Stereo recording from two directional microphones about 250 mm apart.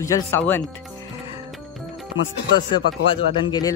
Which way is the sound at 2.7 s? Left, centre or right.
Centre.